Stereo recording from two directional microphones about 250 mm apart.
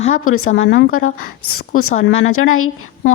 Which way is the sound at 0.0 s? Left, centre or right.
Left.